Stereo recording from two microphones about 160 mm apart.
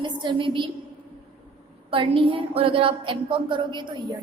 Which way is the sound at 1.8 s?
35° right (ahead or behind).